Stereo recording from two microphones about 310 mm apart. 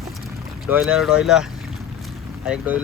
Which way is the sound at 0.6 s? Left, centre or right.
Centre.